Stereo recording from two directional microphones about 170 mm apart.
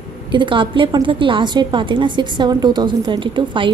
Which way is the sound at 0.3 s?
30° right (ahead or behind).